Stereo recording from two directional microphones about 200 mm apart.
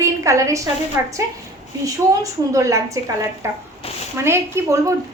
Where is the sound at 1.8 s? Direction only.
15° right (ahead or behind).